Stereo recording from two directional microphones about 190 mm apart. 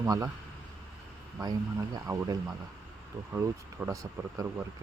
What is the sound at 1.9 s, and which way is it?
Speech, 20° right (ahead or behind).